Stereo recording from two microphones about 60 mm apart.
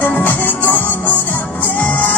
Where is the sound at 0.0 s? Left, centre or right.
Left.